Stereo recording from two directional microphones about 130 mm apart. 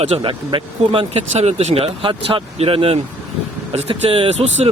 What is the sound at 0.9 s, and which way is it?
Speech, 55° right (ahead or behind).